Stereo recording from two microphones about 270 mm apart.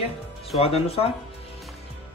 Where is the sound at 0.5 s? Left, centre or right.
Left.